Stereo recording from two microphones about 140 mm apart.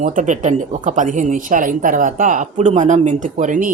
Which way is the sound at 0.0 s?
70° right (ahead or behind).